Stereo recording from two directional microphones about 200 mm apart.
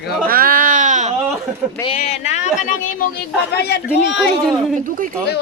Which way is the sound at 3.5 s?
55° left (ahead or behind).